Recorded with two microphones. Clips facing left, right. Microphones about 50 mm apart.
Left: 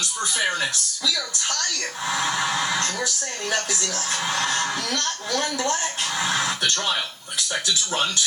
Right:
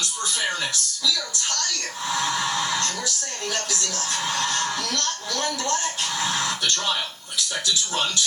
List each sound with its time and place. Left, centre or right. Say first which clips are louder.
0.2 s speech: left 3 dB; centre
2.0 s speech: left 1 dB; centre